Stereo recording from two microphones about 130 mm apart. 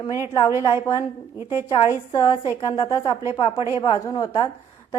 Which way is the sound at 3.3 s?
40° left (ahead or behind).